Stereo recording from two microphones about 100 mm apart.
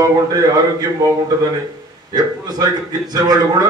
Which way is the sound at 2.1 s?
40° right (ahead or behind).